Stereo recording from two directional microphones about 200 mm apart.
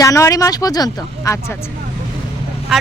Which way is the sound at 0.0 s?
15° left (ahead or behind).